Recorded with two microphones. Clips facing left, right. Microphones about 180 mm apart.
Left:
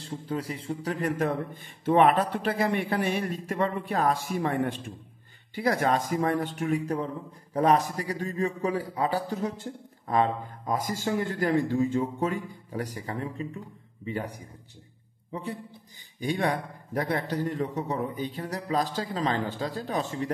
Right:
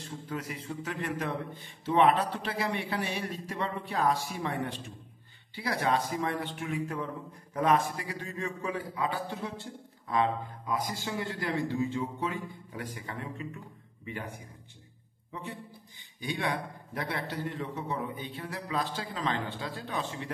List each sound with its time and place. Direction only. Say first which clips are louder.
0.0 s a man's voice: left 5 dB; 30° left (ahead or behind)
1.0 s a man's voice: left 7 dB; 45° left (ahead or behind)
16.2 s a man's voice: left 5 dB; 45° left (ahead or behind)